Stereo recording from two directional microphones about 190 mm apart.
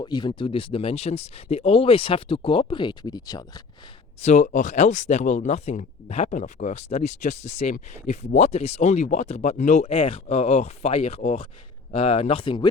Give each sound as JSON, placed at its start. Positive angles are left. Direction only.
{"t": 0.0, "sound": "speech", "side_deg": 25}
{"t": 4.2, "sound": "speech", "side_deg": 35}